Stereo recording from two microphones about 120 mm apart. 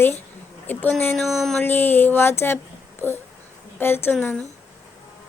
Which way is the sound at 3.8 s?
20° left (ahead or behind).